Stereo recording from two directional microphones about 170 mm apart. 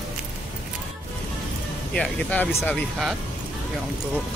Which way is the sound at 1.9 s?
5° left (ahead or behind).